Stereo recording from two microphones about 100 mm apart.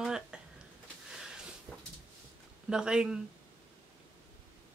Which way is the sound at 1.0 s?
5° right (ahead or behind).